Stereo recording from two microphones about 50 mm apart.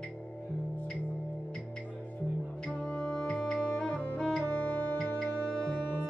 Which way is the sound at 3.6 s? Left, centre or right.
Left.